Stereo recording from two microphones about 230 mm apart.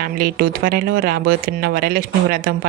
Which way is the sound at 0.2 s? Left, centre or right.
Right.